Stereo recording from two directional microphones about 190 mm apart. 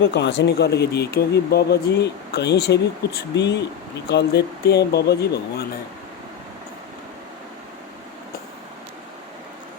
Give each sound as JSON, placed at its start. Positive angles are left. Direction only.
{"t": 0.0, "sound": "speech", "side_deg": 70}